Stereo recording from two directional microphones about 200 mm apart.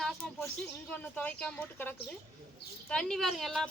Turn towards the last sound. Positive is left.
turn(degrees=0)  # may be behind; listen again after turning